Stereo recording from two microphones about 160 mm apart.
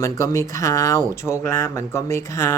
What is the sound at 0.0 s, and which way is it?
Speech, 20° left (ahead or behind).